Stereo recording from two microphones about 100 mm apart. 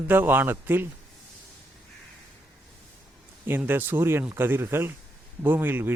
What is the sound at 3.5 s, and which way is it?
Speech, 20° right (ahead or behind).